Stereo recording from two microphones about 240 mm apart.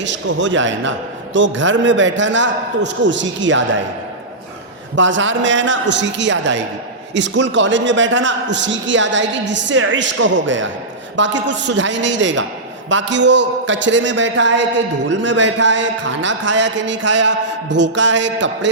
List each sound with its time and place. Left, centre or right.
0.0 s a man's voice: right
4.9 s a man's voice: right